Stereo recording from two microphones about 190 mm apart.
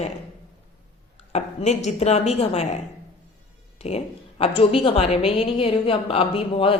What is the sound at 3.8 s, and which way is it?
A woman's voice, 35° left (ahead or behind).